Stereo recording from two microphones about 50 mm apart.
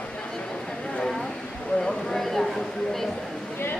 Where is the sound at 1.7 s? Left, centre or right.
Centre.